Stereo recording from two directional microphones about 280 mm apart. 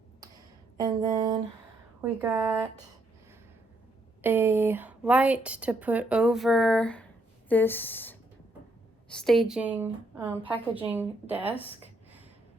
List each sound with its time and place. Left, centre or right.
0.8 s a woman's voice: centre
4.2 s a woman's voice: centre